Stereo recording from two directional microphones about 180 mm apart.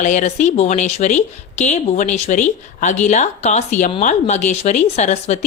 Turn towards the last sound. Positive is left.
turn(degrees=40)  # may be behind; listen again after turning